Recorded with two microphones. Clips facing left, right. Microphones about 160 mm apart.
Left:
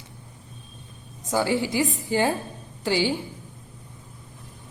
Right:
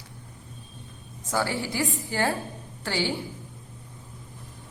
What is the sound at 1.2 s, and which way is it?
A woman's voice, 15° left (ahead or behind).